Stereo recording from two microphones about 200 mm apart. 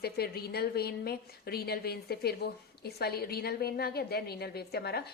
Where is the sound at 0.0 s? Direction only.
50° left (ahead or behind).